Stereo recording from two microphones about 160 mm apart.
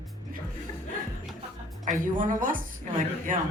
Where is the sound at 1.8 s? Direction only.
55° right (ahead or behind).